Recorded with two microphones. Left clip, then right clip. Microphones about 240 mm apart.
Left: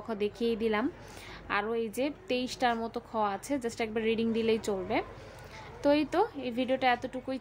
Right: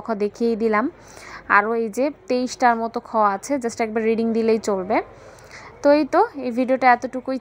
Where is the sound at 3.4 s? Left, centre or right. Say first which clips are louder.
Right 10 dB; centre.